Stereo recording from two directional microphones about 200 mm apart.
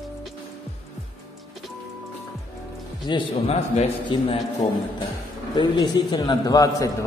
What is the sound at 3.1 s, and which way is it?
A man's voice, 30° left (ahead or behind).